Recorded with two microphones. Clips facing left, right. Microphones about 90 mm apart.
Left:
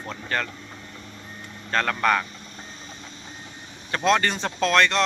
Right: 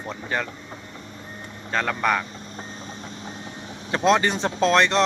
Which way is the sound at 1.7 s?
10° right (ahead or behind).